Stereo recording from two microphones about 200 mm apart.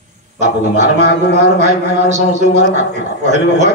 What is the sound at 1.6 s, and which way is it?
Speech, 35° right (ahead or behind).